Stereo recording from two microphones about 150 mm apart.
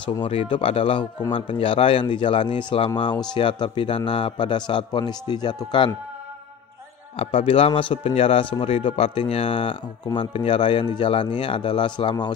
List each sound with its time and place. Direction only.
0.0 s speech: 35° left (ahead or behind)
7.2 s speech: 40° left (ahead or behind)